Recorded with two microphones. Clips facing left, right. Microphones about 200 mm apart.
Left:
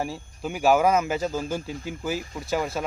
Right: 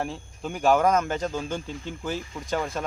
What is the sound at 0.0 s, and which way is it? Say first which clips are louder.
Speech: left 1 dB; 5° left (ahead or behind).